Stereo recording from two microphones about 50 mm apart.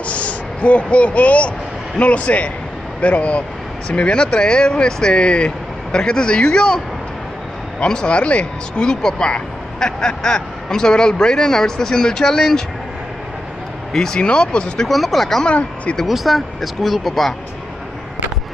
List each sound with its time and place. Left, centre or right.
0.0 s speech: left
7.8 s speech: centre
13.9 s speech: centre
14.9 s speech: centre
15.4 s speech: left
16.1 s speech: centre